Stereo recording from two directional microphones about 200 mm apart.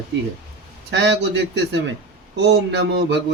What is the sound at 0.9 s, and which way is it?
A man's voice, 60° right (ahead or behind).